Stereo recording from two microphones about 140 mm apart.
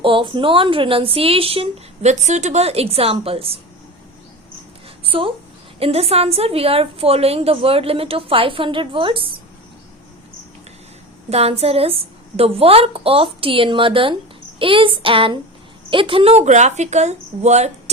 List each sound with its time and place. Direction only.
0.0 s a woman's voice: 40° right (ahead or behind)
5.0 s a woman's voice: 40° right (ahead or behind)
11.3 s a woman's voice: 45° right (ahead or behind)